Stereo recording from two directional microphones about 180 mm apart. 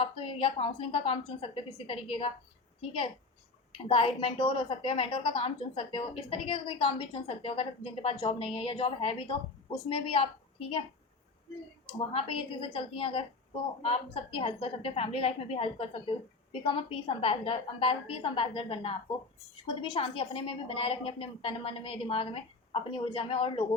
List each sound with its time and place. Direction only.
0.0 s a woman's voice: 30° left (ahead or behind)
11.9 s a woman's voice: 30° left (ahead or behind)